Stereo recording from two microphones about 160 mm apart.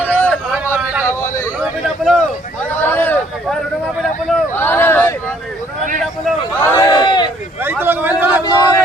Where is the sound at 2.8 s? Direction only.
10° left (ahead or behind).